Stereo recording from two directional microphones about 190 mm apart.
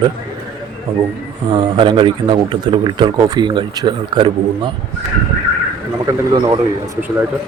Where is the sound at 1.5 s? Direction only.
25° right (ahead or behind).